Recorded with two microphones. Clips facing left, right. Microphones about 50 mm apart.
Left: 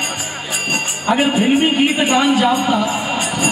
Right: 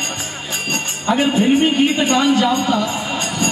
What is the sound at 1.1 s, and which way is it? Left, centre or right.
Speech, centre.